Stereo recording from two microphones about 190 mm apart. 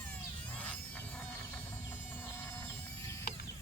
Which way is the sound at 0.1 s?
10° left (ahead or behind).